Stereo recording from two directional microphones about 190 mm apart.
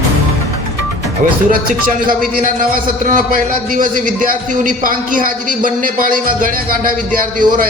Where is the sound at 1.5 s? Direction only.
50° right (ahead or behind).